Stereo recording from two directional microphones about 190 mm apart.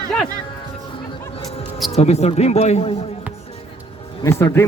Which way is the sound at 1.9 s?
35° left (ahead or behind).